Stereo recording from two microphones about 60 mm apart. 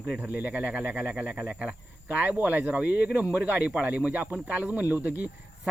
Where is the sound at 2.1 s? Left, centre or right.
Right.